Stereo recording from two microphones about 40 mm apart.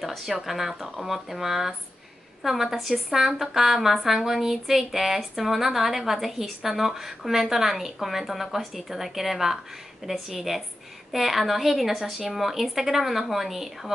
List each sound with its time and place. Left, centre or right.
0.0 s speech: centre